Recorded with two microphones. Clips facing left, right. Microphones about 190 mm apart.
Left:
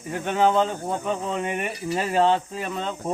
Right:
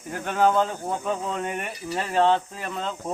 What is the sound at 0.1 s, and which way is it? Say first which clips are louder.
Speech: left 1 dB; centre (ahead or behind).